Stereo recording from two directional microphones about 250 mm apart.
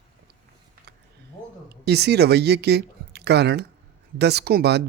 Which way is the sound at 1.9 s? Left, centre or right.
Right.